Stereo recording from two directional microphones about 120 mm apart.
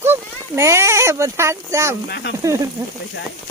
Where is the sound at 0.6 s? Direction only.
25° right (ahead or behind).